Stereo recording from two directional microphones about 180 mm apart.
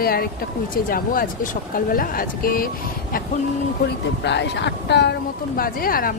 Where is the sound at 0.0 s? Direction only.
55° left (ahead or behind).